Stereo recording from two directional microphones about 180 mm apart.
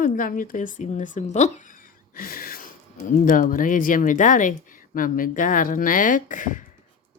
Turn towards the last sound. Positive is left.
turn(degrees=45)  # may be behind; listen again after turning